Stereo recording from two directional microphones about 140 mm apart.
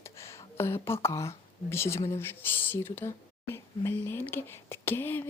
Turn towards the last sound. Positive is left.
turn(degrees=15)  # may be behind; listen again after turning